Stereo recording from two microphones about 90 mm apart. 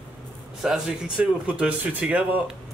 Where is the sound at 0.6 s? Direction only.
5° right (ahead or behind).